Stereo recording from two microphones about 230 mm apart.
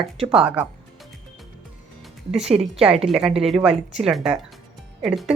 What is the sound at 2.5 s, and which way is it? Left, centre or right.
Speech, right.